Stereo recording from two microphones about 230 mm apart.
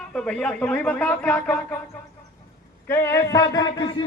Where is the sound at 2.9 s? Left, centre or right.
Centre.